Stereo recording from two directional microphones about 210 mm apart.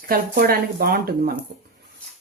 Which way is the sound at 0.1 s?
45° right (ahead or behind).